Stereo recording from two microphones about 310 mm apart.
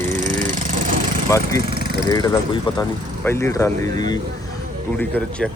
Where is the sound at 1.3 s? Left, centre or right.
Centre.